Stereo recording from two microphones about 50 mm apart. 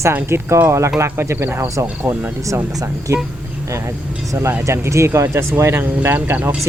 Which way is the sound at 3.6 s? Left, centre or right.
Right.